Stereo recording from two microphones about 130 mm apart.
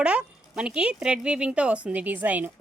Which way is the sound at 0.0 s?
5° right (ahead or behind).